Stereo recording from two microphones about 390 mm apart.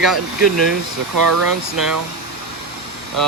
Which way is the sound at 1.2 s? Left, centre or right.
Right.